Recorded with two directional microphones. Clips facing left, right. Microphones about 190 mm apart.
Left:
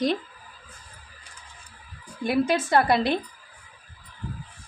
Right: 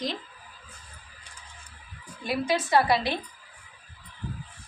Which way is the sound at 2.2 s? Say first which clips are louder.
Left 4 dB; 55° left (ahead or behind).